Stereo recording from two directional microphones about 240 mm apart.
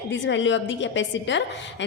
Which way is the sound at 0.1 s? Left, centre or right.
Left.